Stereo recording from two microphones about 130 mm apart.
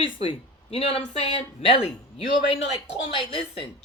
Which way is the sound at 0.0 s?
45° left (ahead or behind).